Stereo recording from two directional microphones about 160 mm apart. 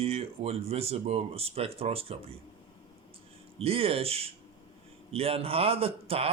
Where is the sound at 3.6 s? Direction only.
35° right (ahead or behind).